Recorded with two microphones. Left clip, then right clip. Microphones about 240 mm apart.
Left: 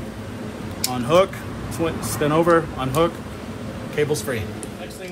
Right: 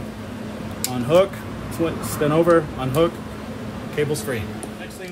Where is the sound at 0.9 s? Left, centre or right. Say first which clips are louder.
Even; left.